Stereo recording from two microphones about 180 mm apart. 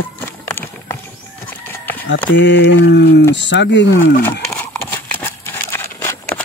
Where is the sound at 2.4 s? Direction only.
75° left (ahead or behind).